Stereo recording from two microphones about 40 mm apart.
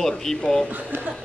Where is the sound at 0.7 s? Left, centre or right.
Right.